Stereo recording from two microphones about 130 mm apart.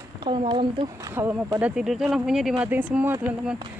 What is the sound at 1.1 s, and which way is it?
Speech, 20° right (ahead or behind).